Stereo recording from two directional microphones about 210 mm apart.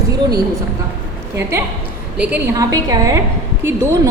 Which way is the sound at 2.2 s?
10° right (ahead or behind).